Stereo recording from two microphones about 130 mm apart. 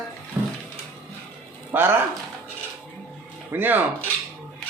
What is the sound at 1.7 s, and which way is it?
Speech, 15° right (ahead or behind).